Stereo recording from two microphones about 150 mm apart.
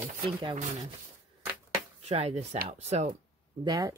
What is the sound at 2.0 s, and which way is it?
Speech, 45° right (ahead or behind).